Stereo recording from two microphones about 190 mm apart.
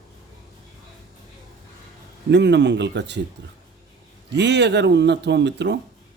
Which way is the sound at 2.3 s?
65° right (ahead or behind).